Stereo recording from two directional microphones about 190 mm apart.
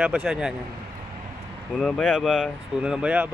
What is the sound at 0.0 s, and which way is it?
Speech, 10° right (ahead or behind).